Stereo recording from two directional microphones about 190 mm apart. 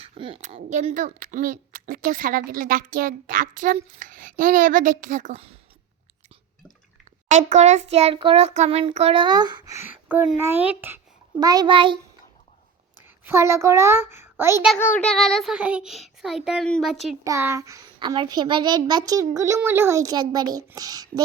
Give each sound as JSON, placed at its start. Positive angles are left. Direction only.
{"t": 0.0, "sound": "a woman's voice", "side_deg": -30}
{"t": 7.3, "sound": "a child's voice", "side_deg": -40}
{"t": 13.2, "sound": "a child's voice", "side_deg": -15}
{"t": 14.8, "sound": "child singing", "side_deg": 10}
{"t": 17.2, "sound": "a child's voice", "side_deg": -15}